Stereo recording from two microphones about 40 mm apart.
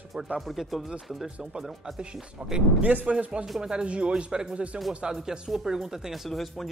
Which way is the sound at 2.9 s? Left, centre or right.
Right.